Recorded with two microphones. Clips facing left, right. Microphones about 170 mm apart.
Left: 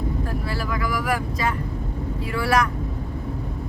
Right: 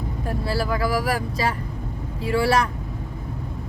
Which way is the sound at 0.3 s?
30° right (ahead or behind).